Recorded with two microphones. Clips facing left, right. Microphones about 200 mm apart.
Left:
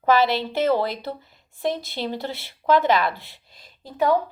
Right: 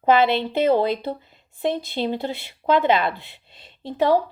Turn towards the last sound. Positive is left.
turn(degrees=-30)  # may be behind; listen again after turning